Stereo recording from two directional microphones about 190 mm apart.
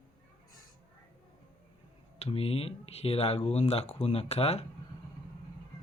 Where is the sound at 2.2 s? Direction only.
30° left (ahead or behind).